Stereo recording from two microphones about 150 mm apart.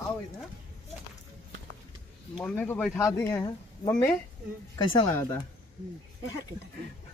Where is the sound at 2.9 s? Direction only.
25° left (ahead or behind).